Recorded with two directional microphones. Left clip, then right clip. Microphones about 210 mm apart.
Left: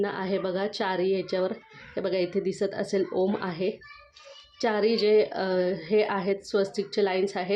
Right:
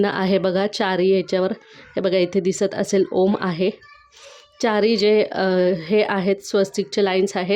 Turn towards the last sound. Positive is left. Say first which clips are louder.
# right 7 dB
turn(degrees=-40)  # may be behind; listen again after turning